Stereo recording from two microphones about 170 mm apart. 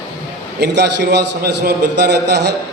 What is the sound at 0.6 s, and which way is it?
A man's voice, 85° right.